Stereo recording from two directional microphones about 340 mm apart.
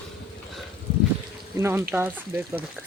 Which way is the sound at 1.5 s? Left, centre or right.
Centre.